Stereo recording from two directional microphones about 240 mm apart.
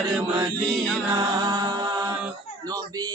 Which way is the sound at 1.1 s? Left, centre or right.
Centre.